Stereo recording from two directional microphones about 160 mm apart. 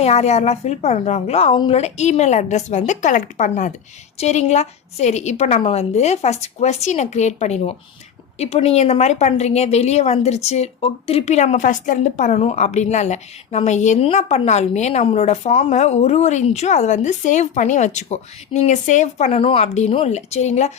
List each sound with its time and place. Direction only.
0.0 s a woman's voice: 45° left (ahead or behind)
1.8 s a woman's voice: 45° left (ahead or behind)